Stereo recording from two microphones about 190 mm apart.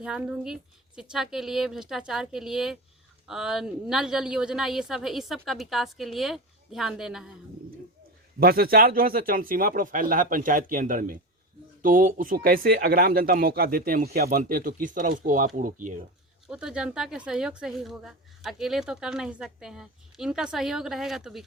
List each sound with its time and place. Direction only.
0.0 s speech: 5° right (ahead or behind)
8.4 s speech: 50° right (ahead or behind)
16.5 s speech: 5° right (ahead or behind)